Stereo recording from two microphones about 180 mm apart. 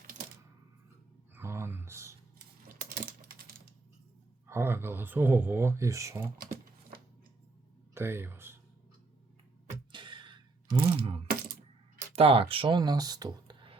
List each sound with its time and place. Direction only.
1.4 s a sound: 15° right (ahead or behind)
2.9 s typing: 55° right (ahead or behind)
4.4 s speech: 15° right (ahead or behind)
7.9 s speech: 15° right (ahead or behind)
9.9 s a sound: 25° right (ahead or behind)
12.1 s speech: 35° right (ahead or behind)